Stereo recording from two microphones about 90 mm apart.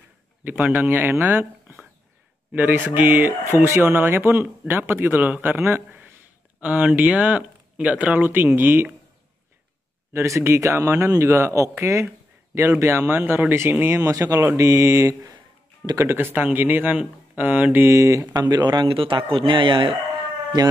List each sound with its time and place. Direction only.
0.7 s speech: 25° right (ahead or behind)
10.1 s speech: 35° right (ahead or behind)
15.8 s speech: 45° right (ahead or behind)
16.1 s speech: 25° right (ahead or behind)
17.8 s speech: 35° right (ahead or behind)
18.3 s speech: 55° right (ahead or behind)
18.9 s speech: 75° right (ahead or behind)